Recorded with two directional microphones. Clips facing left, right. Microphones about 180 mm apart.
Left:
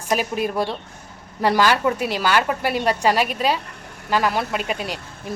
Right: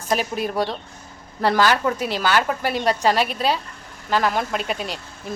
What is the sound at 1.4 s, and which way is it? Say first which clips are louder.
A woman's voice: even; 10° left (ahead or behind).